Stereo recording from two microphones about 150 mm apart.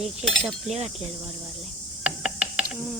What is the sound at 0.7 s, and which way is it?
Speech, 45° right (ahead or behind).